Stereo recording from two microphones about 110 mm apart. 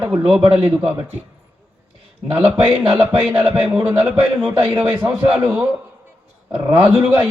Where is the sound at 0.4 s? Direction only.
50° right (ahead or behind).